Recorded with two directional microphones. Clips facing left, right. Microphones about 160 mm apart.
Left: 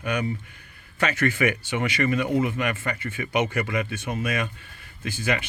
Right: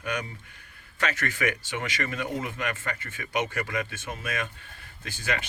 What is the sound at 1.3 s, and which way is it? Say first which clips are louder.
Speech: left 5 dB; 10° left (ahead or behind).